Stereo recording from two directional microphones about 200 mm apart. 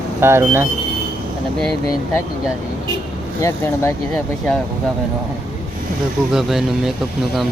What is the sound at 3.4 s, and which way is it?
Speech, 15° left (ahead or behind).